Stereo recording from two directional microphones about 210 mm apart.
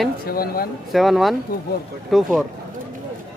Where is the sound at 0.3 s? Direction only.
45° left (ahead or behind).